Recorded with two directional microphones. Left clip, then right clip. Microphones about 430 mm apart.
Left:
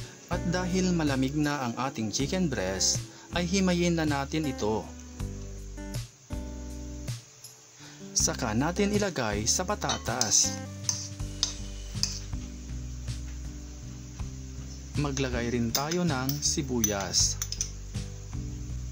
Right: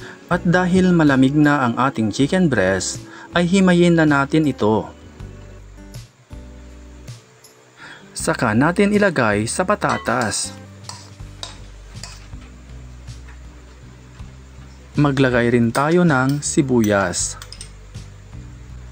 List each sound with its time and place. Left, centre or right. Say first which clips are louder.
0.3 s a man's voice: right 13 dB; left
5.9 s music: left 2 dB; centre
8.2 s a man's voice: right 11 dB; left
15.0 s a man's voice: right 15 dB; left